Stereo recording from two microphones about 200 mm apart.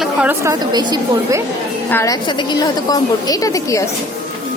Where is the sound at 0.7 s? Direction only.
20° right (ahead or behind).